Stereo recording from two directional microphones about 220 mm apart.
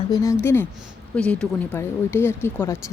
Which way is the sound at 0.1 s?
15° left (ahead or behind).